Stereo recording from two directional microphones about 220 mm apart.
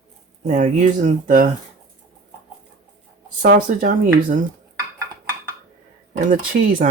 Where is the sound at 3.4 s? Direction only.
40° right (ahead or behind).